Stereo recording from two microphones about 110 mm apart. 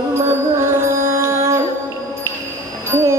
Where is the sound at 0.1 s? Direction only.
25° right (ahead or behind).